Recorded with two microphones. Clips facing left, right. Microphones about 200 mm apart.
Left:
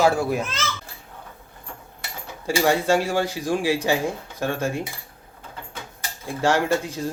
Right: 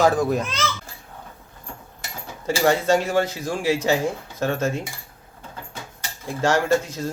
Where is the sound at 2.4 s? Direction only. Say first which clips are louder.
Right 1 dB; 10° left (ahead or behind).